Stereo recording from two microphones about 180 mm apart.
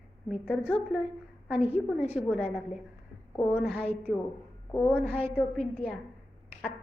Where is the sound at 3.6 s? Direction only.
5° right (ahead or behind).